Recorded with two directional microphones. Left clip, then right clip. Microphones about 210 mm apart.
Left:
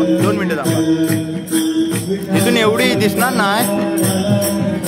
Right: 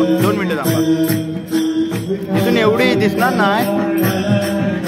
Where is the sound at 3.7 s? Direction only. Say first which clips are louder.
Even; 50° left (ahead or behind).